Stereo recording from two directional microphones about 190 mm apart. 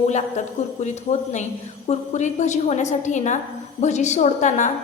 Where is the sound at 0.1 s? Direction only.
40° left (ahead or behind).